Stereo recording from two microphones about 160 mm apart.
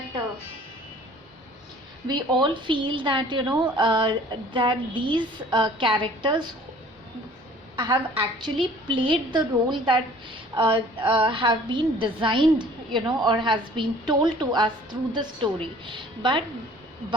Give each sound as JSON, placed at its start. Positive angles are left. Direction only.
{"t": 2.0, "sound": "a woman's voice", "side_deg": -30}
{"t": 7.8, "sound": "a woman's voice", "side_deg": -30}